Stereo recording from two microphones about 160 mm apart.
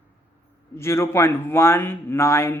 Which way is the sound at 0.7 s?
15° left (ahead or behind).